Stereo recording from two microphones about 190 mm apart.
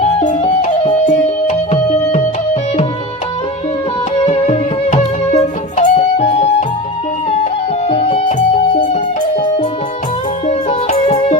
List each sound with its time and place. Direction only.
0.0 s music: 30° left (ahead or behind)
4.3 s music: 35° left (ahead or behind)
7.9 s music: 30° left (ahead or behind)
10.4 s music: 35° left (ahead or behind)